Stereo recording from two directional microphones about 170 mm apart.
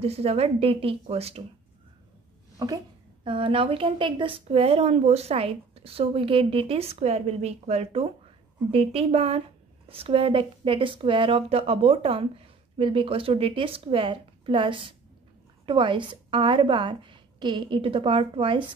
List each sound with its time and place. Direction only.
0.0 s speech: 35° right (ahead or behind)
3.3 s a woman's voice: 30° right (ahead or behind)